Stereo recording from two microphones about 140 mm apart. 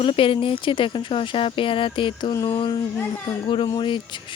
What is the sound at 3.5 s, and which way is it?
Speech, 35° left (ahead or behind).